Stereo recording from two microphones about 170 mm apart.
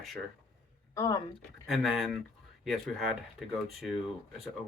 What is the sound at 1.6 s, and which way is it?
Speech, centre (ahead or behind).